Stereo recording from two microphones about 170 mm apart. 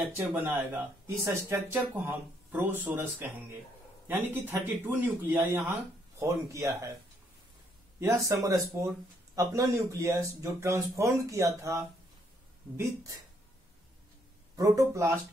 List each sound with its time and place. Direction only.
0.3 s speech: 10° right (ahead or behind)
8.1 s speech: 20° right (ahead or behind)
14.6 s speech: 20° right (ahead or behind)